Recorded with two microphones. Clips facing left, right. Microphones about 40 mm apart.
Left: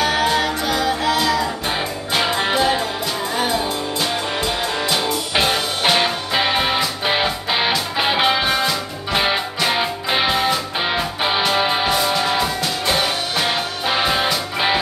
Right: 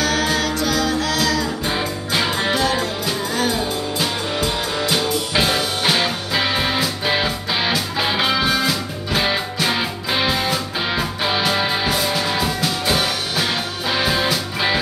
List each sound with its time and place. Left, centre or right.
0.0 s music: left
1.8 s music: centre
4.0 s music: centre